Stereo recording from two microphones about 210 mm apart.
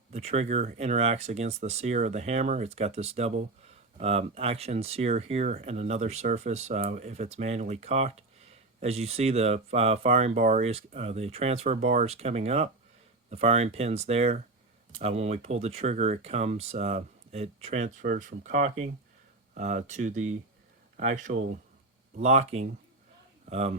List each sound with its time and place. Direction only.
0.1 s speech: 30° right (ahead or behind)